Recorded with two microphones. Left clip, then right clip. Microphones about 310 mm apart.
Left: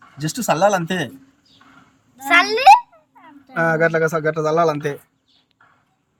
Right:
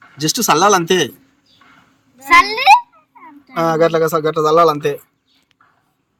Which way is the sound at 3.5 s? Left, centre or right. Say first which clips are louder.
Right 3 dB; centre.